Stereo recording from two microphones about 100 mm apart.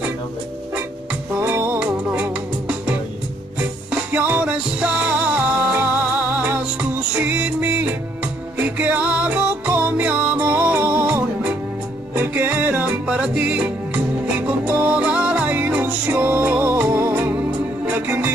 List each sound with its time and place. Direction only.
1.3 s music: 20° right (ahead or behind)